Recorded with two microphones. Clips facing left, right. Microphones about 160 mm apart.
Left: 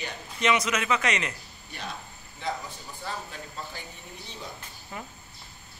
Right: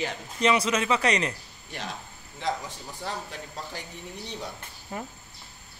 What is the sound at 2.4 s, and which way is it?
Speech, 90° right.